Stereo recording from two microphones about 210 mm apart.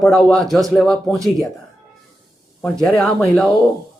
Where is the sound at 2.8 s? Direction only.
5° left (ahead or behind).